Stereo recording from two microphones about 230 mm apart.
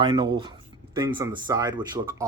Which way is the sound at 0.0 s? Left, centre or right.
Centre.